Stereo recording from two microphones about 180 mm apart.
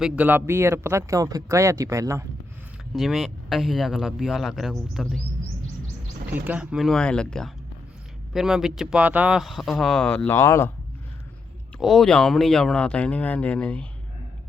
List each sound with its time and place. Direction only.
0.0 s speech: 10° right (ahead or behind)
2.9 s speech: centre (ahead or behind)
6.3 s speech: 10° right (ahead or behind); by 10.7 s 15° left (ahead or behind)
11.8 s speech: centre (ahead or behind)